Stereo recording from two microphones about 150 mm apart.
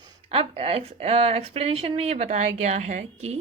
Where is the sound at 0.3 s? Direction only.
40° right (ahead or behind).